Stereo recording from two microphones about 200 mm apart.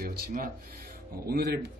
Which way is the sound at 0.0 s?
45° right (ahead or behind).